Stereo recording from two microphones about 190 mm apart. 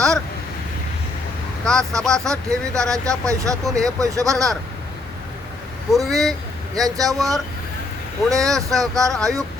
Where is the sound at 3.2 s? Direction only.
15° right (ahead or behind).